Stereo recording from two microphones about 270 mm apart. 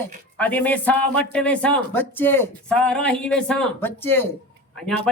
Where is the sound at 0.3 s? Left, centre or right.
Centre.